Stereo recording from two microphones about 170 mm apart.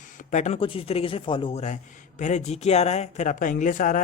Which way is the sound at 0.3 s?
45° left (ahead or behind).